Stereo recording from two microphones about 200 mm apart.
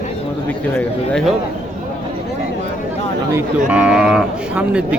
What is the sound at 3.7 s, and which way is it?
Speech, 5° right (ahead or behind).